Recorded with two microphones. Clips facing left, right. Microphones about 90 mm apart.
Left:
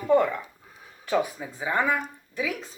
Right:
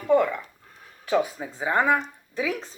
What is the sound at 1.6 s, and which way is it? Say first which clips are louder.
Speech: right 3 dB; 20° right (ahead or behind).